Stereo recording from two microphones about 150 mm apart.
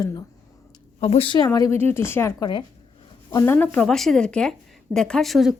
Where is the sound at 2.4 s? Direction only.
30° left (ahead or behind).